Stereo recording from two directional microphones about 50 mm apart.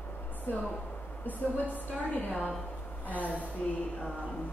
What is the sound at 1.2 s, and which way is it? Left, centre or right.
A woman's voice, left.